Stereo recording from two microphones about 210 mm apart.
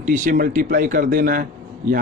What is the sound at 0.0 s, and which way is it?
Speech, 40° right (ahead or behind).